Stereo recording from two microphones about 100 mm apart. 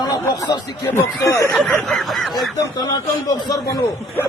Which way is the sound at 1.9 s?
Centre (ahead or behind).